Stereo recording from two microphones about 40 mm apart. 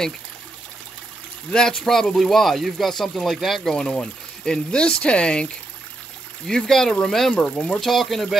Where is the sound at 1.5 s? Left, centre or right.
Centre.